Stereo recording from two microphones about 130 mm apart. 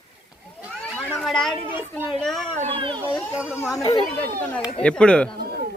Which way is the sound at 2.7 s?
40° right (ahead or behind).